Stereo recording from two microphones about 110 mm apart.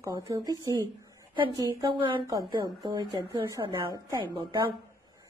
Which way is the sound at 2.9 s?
45° right (ahead or behind).